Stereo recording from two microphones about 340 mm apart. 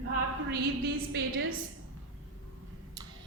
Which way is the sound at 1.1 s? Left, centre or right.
Right.